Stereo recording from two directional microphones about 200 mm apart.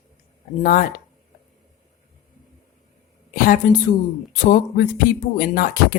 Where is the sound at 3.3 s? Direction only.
45° left (ahead or behind).